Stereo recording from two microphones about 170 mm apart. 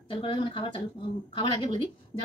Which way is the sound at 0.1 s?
30° left (ahead or behind).